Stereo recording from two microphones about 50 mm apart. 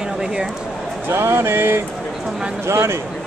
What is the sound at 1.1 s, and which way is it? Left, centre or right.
Speech, right.